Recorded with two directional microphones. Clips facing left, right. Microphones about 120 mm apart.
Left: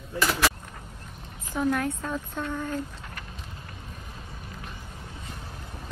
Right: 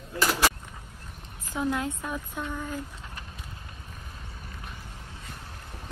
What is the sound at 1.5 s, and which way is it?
A woman's voice, 15° right (ahead or behind).